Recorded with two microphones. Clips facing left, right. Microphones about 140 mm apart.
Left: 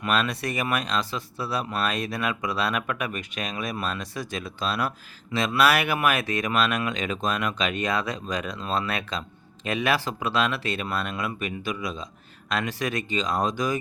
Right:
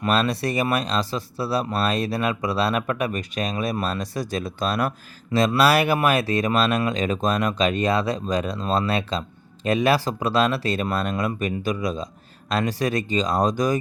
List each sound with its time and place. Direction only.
0.0 s speech: 35° right (ahead or behind)